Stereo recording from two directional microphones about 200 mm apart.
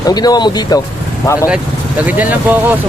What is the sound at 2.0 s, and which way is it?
Speech, 10° right (ahead or behind).